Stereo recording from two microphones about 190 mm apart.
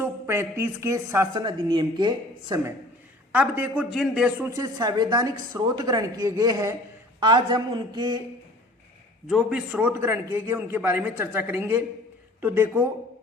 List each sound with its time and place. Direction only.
0.0 s a woman's voice: 15° right (ahead or behind)
3.3 s a man's voice: 10° right (ahead or behind)
4.4 s a woman's voice: 15° right (ahead or behind)
9.2 s a man's voice: 5° right (ahead or behind)